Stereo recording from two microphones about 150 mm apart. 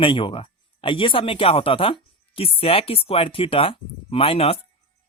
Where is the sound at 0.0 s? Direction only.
35° left (ahead or behind).